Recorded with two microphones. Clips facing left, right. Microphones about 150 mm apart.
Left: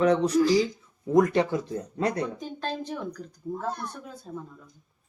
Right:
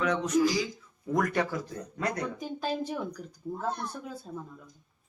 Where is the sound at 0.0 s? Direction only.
35° left (ahead or behind).